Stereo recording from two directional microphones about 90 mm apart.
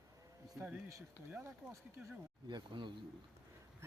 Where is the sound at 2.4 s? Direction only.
65° right (ahead or behind).